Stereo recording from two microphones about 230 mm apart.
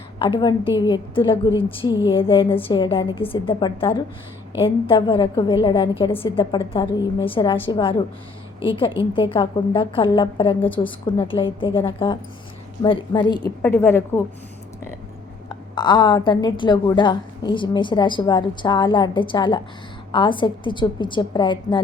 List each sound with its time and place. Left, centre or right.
0.2 s a woman's voice: centre
15.4 s a woman's voice: centre